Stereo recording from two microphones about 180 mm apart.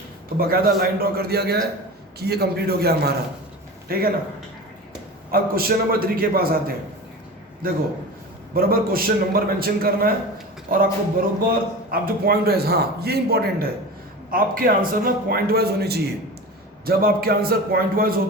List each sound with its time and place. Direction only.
0.3 s a man's voice: 55° right (ahead or behind)
5.3 s a man's voice: 55° right (ahead or behind)